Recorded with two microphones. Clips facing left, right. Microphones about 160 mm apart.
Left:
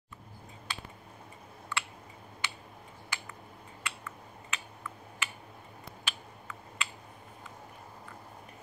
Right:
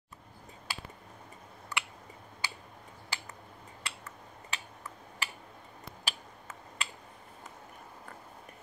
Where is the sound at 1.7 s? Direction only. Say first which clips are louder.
Left 1 dB; 40° right (ahead or behind).